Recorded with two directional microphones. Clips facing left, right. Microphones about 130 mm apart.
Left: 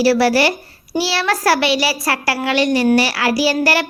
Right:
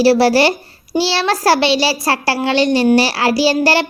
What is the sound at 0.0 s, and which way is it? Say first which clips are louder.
A child's voice: right 3 dB; 30° right (ahead or behind).